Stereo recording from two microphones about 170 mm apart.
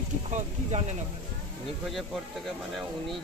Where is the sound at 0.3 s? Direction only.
40° right (ahead or behind).